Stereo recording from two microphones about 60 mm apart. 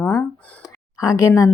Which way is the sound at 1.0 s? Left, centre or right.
Left.